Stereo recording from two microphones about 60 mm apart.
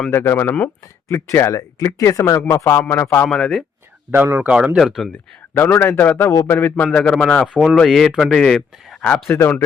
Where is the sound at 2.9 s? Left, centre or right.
Left.